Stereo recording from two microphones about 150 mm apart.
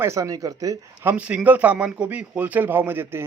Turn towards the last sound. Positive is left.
turn(degrees=-15)  # may be behind; listen again after turning